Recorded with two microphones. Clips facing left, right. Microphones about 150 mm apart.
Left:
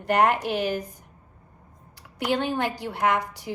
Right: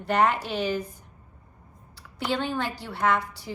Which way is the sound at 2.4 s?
15° left (ahead or behind).